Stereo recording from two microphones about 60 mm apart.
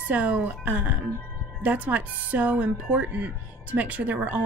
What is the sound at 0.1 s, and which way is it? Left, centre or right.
Speech, right.